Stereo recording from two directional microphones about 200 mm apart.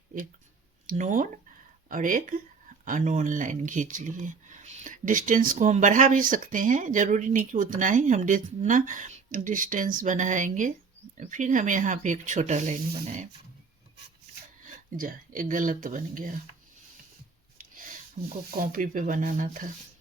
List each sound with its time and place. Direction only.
0.9 s speech: 40° right (ahead or behind)
14.8 s speech: 40° right (ahead or behind)
17.6 s a sound: 40° right (ahead or behind)
18.2 s speech: 40° right (ahead or behind)